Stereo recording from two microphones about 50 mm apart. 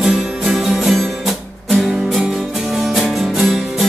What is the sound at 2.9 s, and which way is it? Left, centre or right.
Music, centre.